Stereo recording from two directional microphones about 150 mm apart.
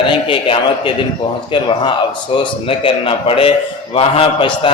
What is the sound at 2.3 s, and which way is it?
A man's voice, 35° left (ahead or behind).